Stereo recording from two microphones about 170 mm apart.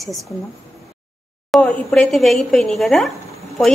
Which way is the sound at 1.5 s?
5° left (ahead or behind).